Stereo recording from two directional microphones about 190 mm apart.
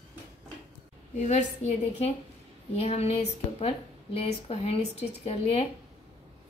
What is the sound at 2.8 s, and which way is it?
A woman's voice, 35° left (ahead or behind).